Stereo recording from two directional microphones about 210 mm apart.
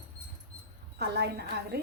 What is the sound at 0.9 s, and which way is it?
Speech, 50° right (ahead or behind).